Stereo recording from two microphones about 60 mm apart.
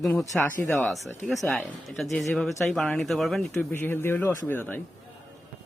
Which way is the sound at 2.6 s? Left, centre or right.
Left.